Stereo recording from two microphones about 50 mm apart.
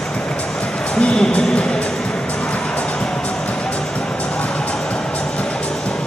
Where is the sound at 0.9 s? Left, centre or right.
Centre.